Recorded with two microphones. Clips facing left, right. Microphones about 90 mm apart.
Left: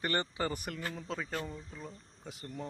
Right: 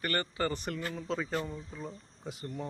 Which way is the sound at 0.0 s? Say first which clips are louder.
Right 1 dB; 20° left (ahead or behind).